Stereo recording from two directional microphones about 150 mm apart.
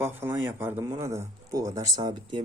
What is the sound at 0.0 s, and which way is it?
A man's voice, 15° right (ahead or behind).